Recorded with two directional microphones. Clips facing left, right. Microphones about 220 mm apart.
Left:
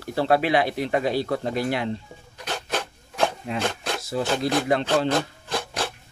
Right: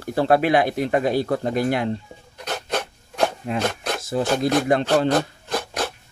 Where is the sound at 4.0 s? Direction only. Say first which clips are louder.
Right 4 dB; 50° right (ahead or behind).